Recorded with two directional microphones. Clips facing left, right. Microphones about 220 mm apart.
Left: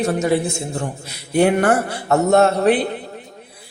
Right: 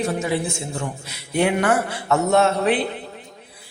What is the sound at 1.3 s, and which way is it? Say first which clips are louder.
Speech: left 4 dB; 40° left (ahead or behind).